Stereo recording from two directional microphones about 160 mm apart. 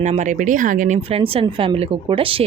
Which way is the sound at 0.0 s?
50° right (ahead or behind).